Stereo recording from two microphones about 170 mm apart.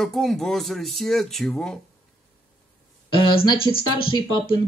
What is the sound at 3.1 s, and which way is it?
A man's voice, 25° left (ahead or behind).